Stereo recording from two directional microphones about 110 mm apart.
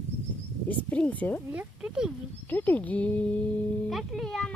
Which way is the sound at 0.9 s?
15° left (ahead or behind).